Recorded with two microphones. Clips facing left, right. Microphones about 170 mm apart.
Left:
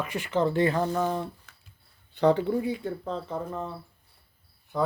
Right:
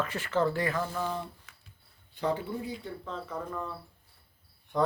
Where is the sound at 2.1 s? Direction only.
70° left (ahead or behind).